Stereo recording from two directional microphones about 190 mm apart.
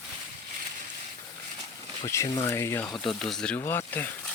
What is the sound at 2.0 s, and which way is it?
Speech, 15° left (ahead or behind).